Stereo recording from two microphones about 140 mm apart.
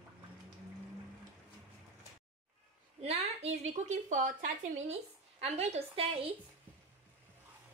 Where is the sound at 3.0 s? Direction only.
45° right (ahead or behind).